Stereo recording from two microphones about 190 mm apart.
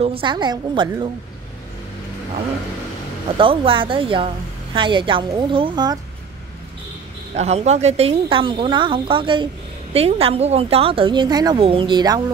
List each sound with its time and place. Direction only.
0.0 s a woman's voice: 25° right (ahead or behind)
3.3 s a woman's voice: 25° right (ahead or behind)
7.3 s a woman's voice: 35° right (ahead or behind)